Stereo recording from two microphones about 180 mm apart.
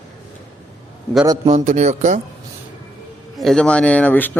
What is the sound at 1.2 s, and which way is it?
Speech, 20° right (ahead or behind).